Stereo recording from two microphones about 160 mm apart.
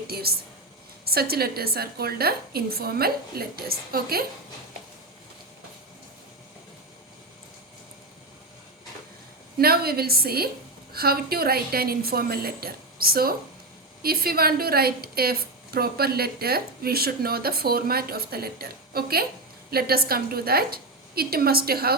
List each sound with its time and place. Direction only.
0.1 s a woman's voice: 75° right (ahead or behind)
9.6 s a woman's voice: 70° right (ahead or behind)